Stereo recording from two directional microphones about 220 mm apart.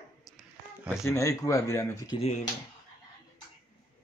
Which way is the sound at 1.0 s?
15° left (ahead or behind).